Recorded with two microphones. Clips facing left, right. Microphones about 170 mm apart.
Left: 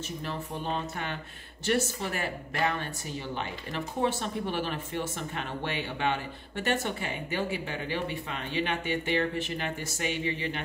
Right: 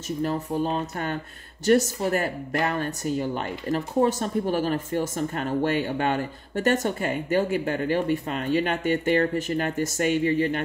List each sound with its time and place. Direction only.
0.2 s speech: 40° right (ahead or behind)